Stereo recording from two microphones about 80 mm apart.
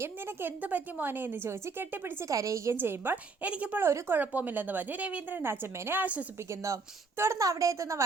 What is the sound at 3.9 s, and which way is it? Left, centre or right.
A woman's voice, right.